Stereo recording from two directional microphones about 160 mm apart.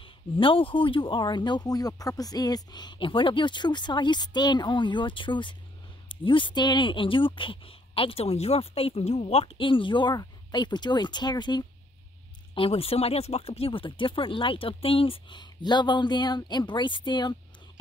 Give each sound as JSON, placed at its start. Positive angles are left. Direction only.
{"t": 0.0, "sound": "speech", "side_deg": 35}